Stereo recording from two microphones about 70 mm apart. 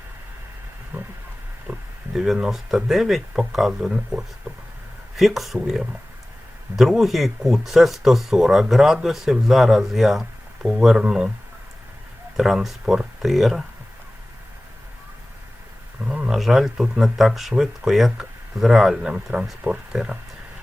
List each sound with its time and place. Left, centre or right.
0.9 s wild animals: right
2.1 s speech: centre
12.4 s speech: centre
16.0 s a sound: centre
16.4 s speech: centre